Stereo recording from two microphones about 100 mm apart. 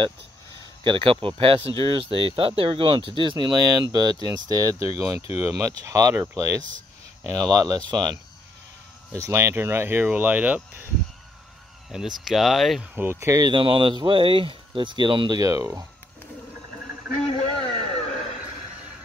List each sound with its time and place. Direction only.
0.8 s speech: 55° right (ahead or behind); by 4.8 s 30° right (ahead or behind)
5.1 s speech: 90° left
5.6 s speech: 35° right (ahead or behind)
9.1 s speech: 30° right (ahead or behind)
12.3 s speech: centre (ahead or behind)
12.9 s speech: 25° right (ahead or behind)
13.5 s speech: 60° right (ahead or behind); by 15.8 s 35° right (ahead or behind)
17.2 s a sound: 75° left (ahead or behind)